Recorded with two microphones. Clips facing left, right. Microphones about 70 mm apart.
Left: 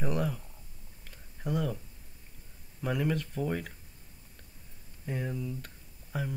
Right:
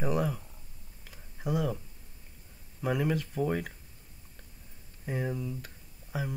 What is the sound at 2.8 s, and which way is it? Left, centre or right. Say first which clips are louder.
Speech: right 1 dB; centre.